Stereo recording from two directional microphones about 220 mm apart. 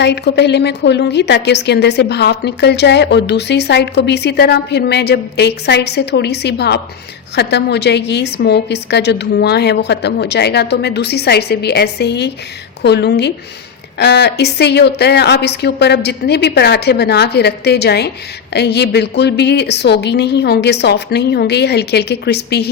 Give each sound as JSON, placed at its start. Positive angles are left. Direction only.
{"t": 0.0, "sound": "a woman's voice", "side_deg": 50}